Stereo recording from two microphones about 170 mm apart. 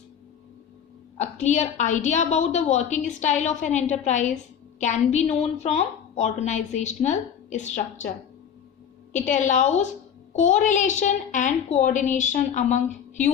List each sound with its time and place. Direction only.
1.2 s a woman's voice: 45° left (ahead or behind)
9.2 s a woman's voice: 45° left (ahead or behind)